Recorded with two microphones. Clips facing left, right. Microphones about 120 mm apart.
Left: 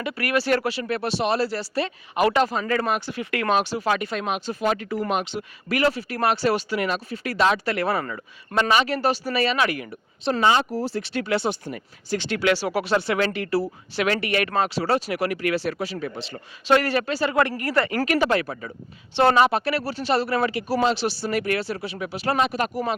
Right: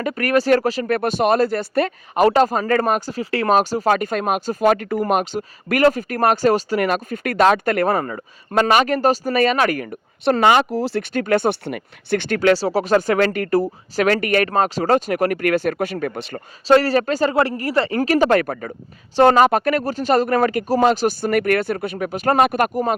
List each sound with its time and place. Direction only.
0.0 s speech: 45° right (ahead or behind)
10.4 s speech: 75° right (ahead or behind)
11.1 s speech: 50° right (ahead or behind)
11.6 s speech: 65° right (ahead or behind)
16.6 s speech: 35° right (ahead or behind)
17.3 s speech: 30° right (ahead or behind)
18.3 s speech: 50° right (ahead or behind)
19.1 s speech: 40° right (ahead or behind)